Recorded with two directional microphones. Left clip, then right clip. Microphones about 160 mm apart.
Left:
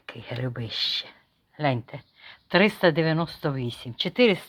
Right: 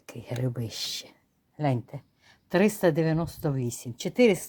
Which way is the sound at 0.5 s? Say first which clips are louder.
Left 7 dB; 30° right (ahead or behind).